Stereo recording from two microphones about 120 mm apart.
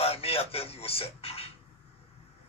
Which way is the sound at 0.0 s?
55° left (ahead or behind).